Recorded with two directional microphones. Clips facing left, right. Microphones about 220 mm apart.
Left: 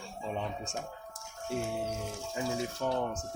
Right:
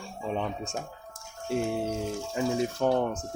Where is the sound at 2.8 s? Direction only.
70° right (ahead or behind).